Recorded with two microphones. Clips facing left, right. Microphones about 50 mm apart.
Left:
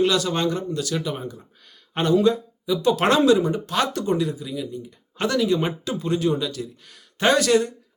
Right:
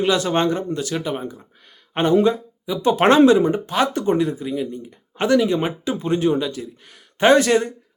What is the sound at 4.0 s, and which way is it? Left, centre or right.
Speech, right.